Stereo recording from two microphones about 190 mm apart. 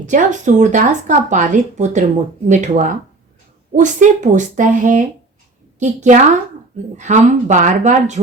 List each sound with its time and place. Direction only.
0.0 s a woman's voice: 40° right (ahead or behind)